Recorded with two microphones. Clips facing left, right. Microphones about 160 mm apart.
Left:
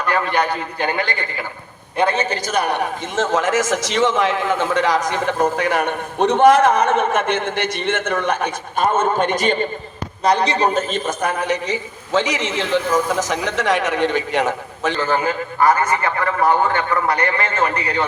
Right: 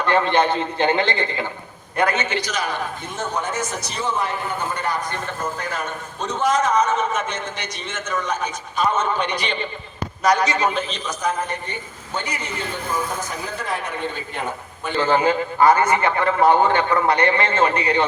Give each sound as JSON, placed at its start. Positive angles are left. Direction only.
{"t": 0.0, "sound": "a man's voice", "side_deg": -25}
{"t": 2.0, "sound": "a man's voice", "side_deg": 30}
{"t": 2.5, "sound": "a man's voice", "side_deg": 65}
{"t": 10.2, "sound": "a man's voice", "side_deg": 30}
{"t": 14.9, "sound": "a man's voice", "side_deg": -25}